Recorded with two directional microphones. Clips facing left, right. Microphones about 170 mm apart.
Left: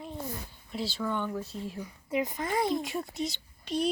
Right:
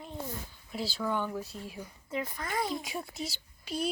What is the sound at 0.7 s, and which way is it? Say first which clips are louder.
Speech: even; centre (ahead or behind).